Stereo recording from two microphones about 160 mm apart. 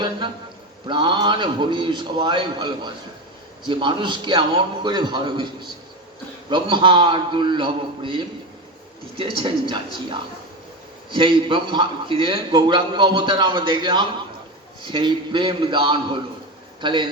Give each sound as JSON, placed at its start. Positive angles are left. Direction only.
{"t": 0.9, "sound": "a man's voice", "side_deg": -30}